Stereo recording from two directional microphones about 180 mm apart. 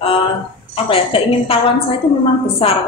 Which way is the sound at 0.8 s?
30° left (ahead or behind).